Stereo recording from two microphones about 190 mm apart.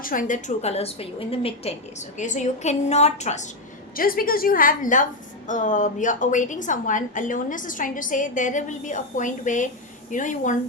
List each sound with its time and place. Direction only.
0.0 s a woman's voice: 45° left (ahead or behind)
3.9 s a woman's voice: 50° left (ahead or behind)